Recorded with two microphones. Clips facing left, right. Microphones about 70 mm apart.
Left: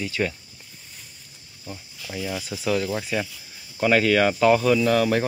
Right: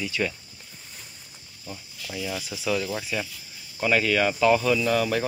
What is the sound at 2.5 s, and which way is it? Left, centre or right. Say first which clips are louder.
Speech: left 3 dB; left.